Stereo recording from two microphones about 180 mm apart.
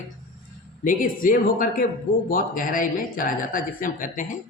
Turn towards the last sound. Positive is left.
turn(degrees=45)  # may be behind; listen again after turning